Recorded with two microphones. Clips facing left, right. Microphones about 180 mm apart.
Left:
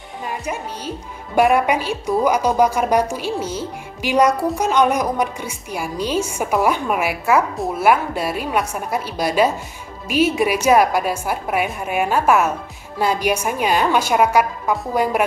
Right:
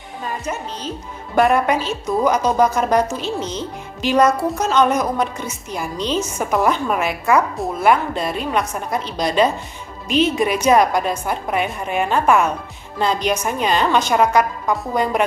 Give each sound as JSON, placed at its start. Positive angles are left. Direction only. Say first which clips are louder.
{"t": 0.2, "sound": "a woman's voice", "louder": "even", "side_deg": 10}